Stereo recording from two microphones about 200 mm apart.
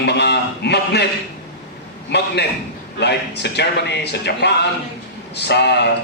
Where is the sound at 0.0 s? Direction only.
55° left (ahead or behind).